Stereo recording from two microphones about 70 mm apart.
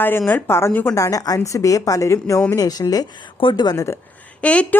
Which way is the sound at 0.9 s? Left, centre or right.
Left.